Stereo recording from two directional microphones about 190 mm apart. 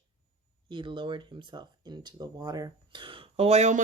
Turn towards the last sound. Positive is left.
turn(degrees=-35)  # may be behind; listen again after turning